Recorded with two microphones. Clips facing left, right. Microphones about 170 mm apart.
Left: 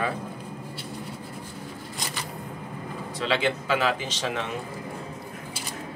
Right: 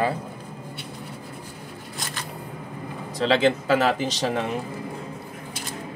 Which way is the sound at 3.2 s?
40° right (ahead or behind).